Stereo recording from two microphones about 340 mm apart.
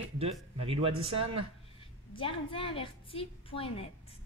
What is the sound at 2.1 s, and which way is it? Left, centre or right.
A woman's voice, centre.